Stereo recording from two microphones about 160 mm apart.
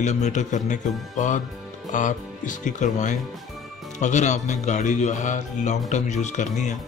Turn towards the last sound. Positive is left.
turn(degrees=50)  # may be behind; listen again after turning